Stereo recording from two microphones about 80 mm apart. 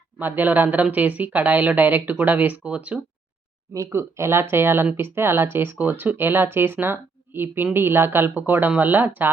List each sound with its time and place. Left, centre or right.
0.2 s speech: right
3.8 s speech: right